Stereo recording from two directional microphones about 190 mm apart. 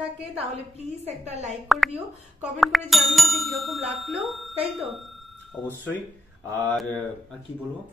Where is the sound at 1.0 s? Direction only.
35° right (ahead or behind).